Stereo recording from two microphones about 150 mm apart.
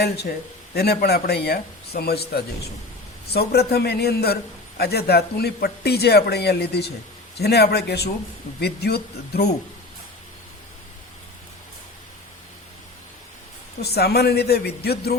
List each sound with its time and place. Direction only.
0.0 s speech: 90° left
13.8 s speech: 90° left